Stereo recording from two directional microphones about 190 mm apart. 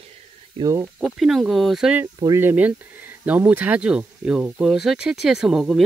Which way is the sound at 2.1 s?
15° right (ahead or behind).